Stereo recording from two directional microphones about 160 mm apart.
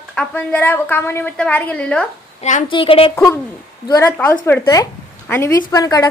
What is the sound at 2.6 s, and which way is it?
Speech, 35° left (ahead or behind).